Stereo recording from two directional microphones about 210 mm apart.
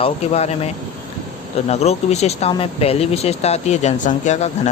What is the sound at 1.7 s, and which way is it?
Speech, 30° left (ahead or behind).